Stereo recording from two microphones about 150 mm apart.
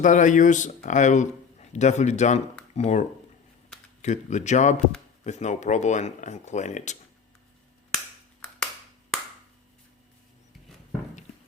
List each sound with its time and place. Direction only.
0.0 s speech: 55° left (ahead or behind)
4.0 s speech: 50° left (ahead or behind)
8.6 s finger snapping: 5° left (ahead or behind)